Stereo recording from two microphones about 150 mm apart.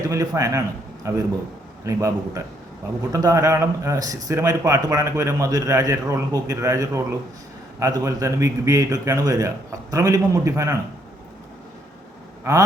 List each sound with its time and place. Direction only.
0.1 s speech: 20° right (ahead or behind)
12.5 s speech: 20° right (ahead or behind)